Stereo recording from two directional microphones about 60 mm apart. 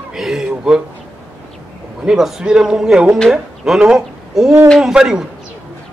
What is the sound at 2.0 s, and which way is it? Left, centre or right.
A man's voice, centre.